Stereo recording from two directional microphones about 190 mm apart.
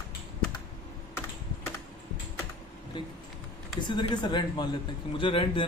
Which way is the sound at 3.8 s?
25° left (ahead or behind).